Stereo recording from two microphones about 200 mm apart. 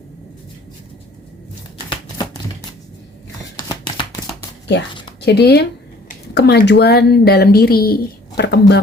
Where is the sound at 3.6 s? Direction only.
20° left (ahead or behind).